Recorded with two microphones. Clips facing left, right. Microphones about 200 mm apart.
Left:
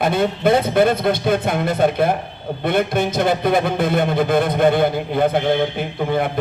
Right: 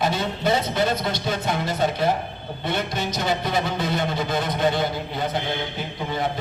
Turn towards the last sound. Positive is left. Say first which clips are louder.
# left 6 dB
turn(degrees=55)  # may be behind; listen again after turning